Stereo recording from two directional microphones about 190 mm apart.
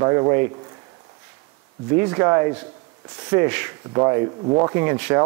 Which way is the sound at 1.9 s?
15° right (ahead or behind).